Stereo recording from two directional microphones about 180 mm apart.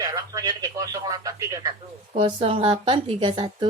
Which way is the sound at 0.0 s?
20° right (ahead or behind).